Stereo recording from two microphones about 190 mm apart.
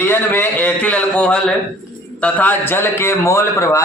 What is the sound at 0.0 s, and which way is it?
A man's voice, 10° left (ahead or behind).